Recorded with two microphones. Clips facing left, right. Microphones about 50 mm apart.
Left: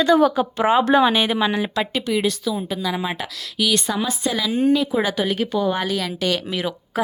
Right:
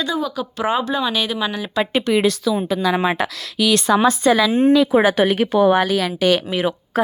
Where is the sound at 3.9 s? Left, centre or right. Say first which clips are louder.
Right 8 dB; right.